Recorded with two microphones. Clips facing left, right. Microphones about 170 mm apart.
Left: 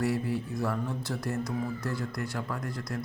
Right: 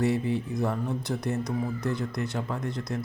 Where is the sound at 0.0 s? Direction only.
20° right (ahead or behind).